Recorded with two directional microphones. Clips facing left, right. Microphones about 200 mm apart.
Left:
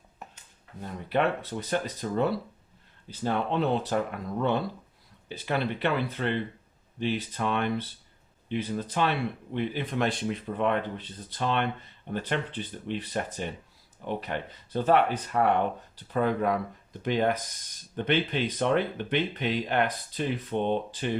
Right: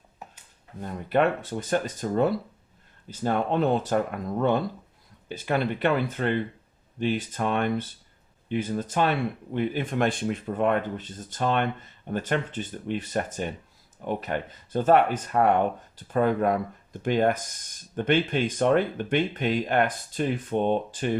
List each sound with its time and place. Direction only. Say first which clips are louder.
0.8 s speech: right 4 dB; 50° right (ahead or behind)